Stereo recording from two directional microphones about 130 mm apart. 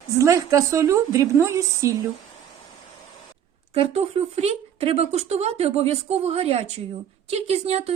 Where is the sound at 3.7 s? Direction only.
50° right (ahead or behind).